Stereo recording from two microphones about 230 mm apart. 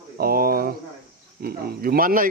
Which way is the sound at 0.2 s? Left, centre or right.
Right.